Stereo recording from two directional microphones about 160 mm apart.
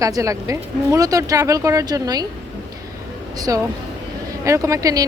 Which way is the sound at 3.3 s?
25° right (ahead or behind).